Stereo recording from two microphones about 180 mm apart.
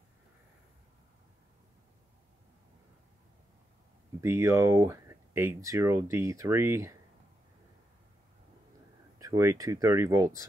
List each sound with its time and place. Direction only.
4.2 s speech: 15° right (ahead or behind)
9.2 s speech: 20° right (ahead or behind)